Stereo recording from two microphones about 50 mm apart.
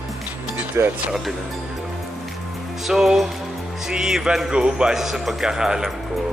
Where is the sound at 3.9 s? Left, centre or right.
Centre.